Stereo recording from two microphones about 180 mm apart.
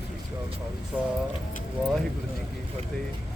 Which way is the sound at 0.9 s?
10° right (ahead or behind).